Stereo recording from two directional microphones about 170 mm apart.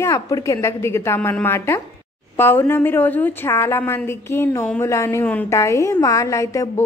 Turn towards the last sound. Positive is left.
turn(degrees=20)  # may be behind; listen again after turning